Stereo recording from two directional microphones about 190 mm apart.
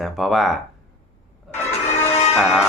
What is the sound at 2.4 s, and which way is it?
Speech, 5° right (ahead or behind).